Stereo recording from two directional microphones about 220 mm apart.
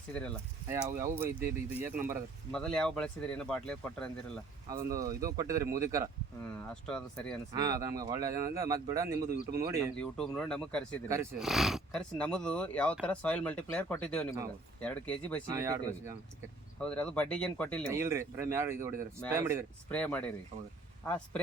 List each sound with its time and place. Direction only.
0.1 s speech: 5° left (ahead or behind)
1.0 s speech: 10° right (ahead or behind)
2.5 s speech: 5° left (ahead or behind)
4.7 s speech: 40° right (ahead or behind)
4.9 s speech: 15° right (ahead or behind)
6.8 s speech: 5° left (ahead or behind)
7.5 s speech: 15° right (ahead or behind)
9.9 s speech: 5° left (ahead or behind)
15.4 s speech: 15° right (ahead or behind)
16.8 s speech: 5° left (ahead or behind)
17.8 s speech: 10° right (ahead or behind)
19.9 s speech: 5° left (ahead or behind)